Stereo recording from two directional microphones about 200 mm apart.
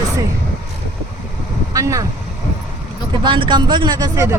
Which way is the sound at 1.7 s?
15° right (ahead or behind).